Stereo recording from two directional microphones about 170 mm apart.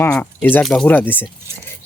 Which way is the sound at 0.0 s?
15° left (ahead or behind).